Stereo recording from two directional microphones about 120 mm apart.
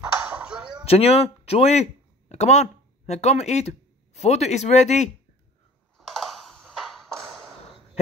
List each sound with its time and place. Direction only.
0.4 s chop: 5° right (ahead or behind)
0.8 s speech: 55° left (ahead or behind)
5.9 s ping: centre (ahead or behind)